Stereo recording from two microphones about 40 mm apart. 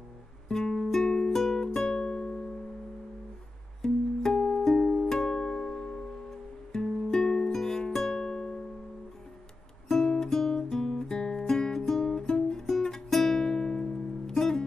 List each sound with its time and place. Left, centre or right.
0.5 s guitar: centre
0.9 s music: centre
1.9 s music: left
3.8 s music: centre
9.8 s music: centre
12.0 s guitar: centre
13.4 s music: centre